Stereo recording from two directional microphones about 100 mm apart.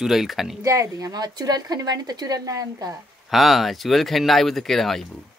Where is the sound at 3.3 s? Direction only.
Centre (ahead or behind).